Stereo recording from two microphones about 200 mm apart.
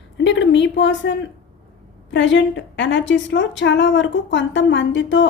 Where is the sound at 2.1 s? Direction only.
65° left (ahead or behind).